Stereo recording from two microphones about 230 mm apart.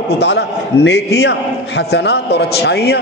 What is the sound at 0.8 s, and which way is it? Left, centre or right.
A man's voice, left.